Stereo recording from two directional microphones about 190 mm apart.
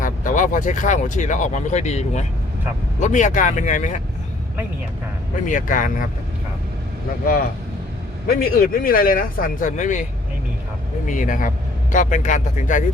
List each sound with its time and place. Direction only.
0.0 s speech: 45° left (ahead or behind)
5.5 s speech: 45° left (ahead or behind)
8.3 s speech: 50° left (ahead or behind)